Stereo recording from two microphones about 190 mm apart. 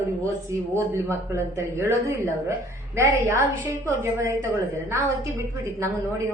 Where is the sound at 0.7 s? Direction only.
15° right (ahead or behind).